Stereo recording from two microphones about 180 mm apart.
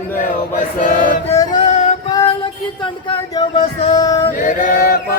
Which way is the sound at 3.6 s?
35° left (ahead or behind).